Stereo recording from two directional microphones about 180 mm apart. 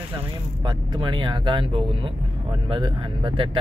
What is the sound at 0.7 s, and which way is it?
Speech, 25° right (ahead or behind).